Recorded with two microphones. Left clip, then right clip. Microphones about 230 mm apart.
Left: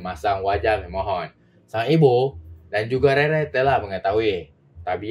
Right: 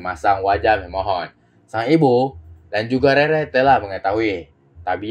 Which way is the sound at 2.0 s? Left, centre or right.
Right.